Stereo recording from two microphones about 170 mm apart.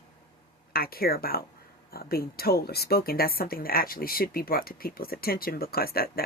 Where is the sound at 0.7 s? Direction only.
60° left (ahead or behind).